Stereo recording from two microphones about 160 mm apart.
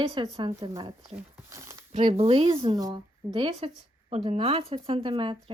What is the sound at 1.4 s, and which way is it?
Crumpling, 15° right (ahead or behind).